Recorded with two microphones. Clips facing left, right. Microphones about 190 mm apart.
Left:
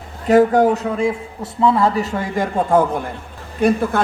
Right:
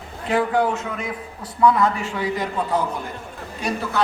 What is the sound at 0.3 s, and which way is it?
A man's voice, 45° left (ahead or behind).